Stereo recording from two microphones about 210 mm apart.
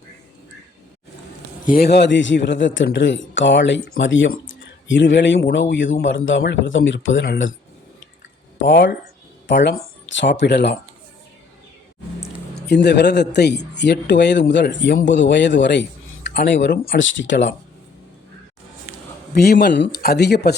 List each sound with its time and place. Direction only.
1.7 s speech: 50° left (ahead or behind)
8.6 s speech: 55° left (ahead or behind)
12.6 s speech: 55° left (ahead or behind)
17.0 s speech: 60° left (ahead or behind)
19.3 s speech: 45° left (ahead or behind)